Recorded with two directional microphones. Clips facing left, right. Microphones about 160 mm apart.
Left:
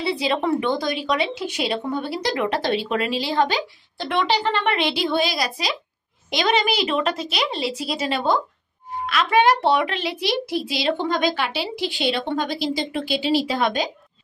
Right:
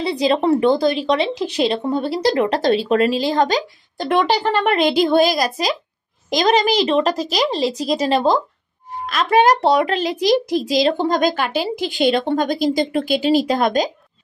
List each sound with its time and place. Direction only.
0.0 s a woman's voice: 40° right (ahead or behind)